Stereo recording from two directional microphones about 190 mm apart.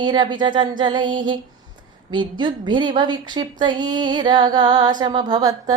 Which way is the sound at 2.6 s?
25° right (ahead or behind).